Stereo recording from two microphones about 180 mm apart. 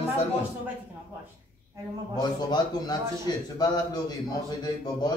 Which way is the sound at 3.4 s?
20° left (ahead or behind).